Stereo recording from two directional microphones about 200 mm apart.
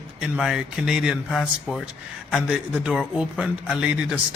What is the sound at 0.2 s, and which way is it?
A man's voice, centre (ahead or behind).